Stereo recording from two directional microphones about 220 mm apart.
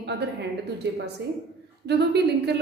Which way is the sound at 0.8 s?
50° right (ahead or behind).